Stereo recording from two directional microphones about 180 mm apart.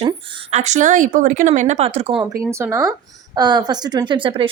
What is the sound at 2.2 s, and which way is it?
Speech, 15° right (ahead or behind).